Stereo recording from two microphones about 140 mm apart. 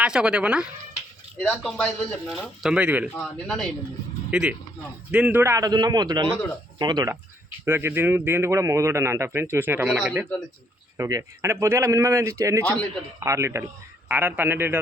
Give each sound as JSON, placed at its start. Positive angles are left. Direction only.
{"t": 0.0, "sound": "speech", "side_deg": -5}
{"t": 1.4, "sound": "speech", "side_deg": 10}
{"t": 2.6, "sound": "speech", "side_deg": -10}
{"t": 3.2, "sound": "speech", "side_deg": 10}
{"t": 7.6, "sound": "speech", "side_deg": -15}